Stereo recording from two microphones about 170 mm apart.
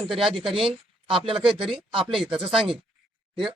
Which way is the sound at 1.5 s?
5° right (ahead or behind).